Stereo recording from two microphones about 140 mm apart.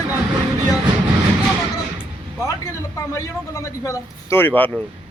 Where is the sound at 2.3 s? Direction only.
20° left (ahead or behind).